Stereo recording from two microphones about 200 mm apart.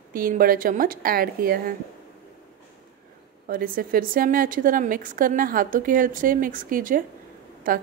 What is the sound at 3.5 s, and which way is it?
A woman's voice, 45° right (ahead or behind).